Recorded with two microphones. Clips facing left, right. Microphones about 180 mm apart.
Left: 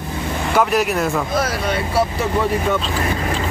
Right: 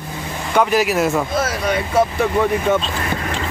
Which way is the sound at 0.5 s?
Centre (ahead or behind).